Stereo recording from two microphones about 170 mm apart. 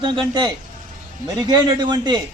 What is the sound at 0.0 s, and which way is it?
A man's voice, 25° right (ahead or behind).